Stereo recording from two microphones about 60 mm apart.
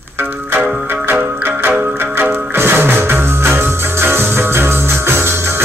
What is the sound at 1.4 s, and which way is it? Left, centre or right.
Music, right.